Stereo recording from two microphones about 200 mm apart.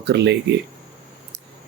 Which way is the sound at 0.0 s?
60° right (ahead or behind).